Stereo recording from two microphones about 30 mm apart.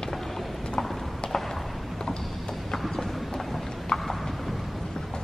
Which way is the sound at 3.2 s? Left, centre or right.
Centre.